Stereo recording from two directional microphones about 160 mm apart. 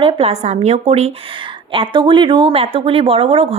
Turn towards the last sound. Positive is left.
turn(degrees=-35)  # may be behind; listen again after turning